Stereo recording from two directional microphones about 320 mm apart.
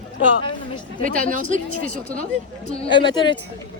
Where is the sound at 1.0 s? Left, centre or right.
Right.